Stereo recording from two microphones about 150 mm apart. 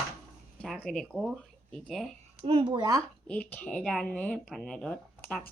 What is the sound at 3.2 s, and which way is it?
Speech, 10° left (ahead or behind).